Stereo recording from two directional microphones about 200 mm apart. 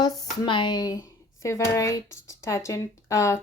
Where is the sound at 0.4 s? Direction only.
25° left (ahead or behind).